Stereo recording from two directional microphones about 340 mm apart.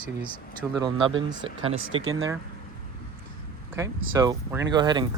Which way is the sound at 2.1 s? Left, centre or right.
Right.